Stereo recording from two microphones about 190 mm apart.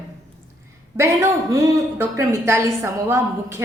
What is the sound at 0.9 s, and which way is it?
A woman's voice, 15° right (ahead or behind).